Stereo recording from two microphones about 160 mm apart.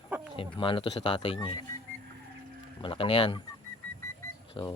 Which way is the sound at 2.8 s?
35° left (ahead or behind).